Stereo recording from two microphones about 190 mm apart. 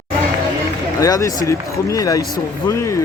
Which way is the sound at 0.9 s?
15° left (ahead or behind).